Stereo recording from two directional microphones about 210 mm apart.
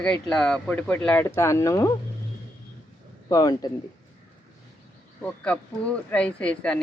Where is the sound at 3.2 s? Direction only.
15° left (ahead or behind).